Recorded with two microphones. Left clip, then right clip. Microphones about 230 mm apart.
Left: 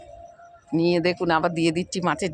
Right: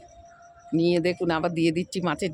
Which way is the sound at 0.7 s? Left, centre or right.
Centre.